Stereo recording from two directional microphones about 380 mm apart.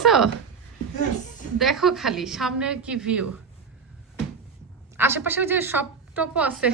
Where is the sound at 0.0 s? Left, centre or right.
Centre.